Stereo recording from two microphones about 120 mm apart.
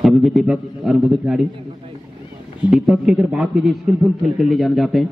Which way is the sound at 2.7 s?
5° right (ahead or behind).